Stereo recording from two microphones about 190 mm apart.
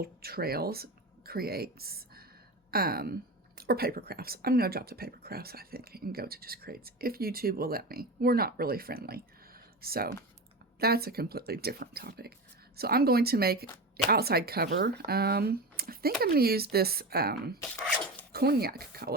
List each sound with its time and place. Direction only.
0.0 s speech: 55° right (ahead or behind)
17.6 s speech: centre (ahead or behind)
18.3 s speech: 55° right (ahead or behind)